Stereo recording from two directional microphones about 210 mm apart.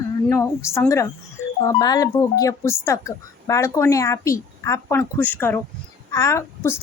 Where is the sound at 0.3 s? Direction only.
15° left (ahead or behind).